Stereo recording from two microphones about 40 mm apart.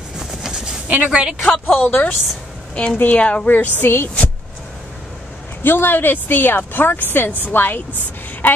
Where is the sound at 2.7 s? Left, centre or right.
Left.